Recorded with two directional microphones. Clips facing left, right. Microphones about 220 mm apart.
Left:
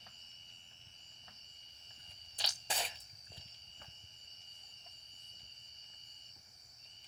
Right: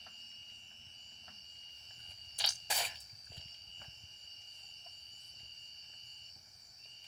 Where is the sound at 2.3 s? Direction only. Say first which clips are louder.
Left 1 dB; 35° left (ahead or behind).